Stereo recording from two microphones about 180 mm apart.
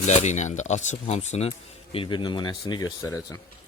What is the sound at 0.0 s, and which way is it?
Speech, 40° left (ahead or behind).